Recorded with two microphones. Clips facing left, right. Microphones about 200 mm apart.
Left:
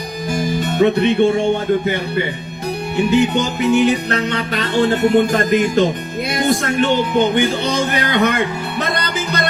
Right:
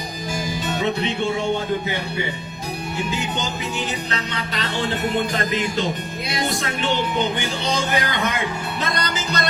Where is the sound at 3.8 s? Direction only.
55° left (ahead or behind).